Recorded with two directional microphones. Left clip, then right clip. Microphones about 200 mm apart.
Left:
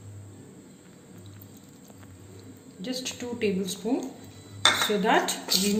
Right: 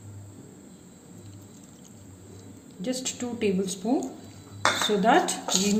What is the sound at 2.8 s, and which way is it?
Speech, 30° right (ahead or behind).